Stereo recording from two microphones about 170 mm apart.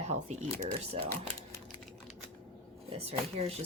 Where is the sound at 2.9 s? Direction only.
35° right (ahead or behind).